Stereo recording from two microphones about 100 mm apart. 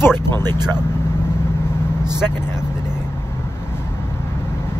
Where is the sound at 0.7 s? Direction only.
25° left (ahead or behind).